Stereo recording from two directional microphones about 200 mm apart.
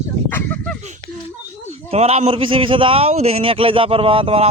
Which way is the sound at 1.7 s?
30° right (ahead or behind).